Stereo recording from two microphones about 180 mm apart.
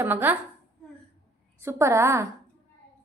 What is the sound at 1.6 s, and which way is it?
Speech, 15° right (ahead or behind).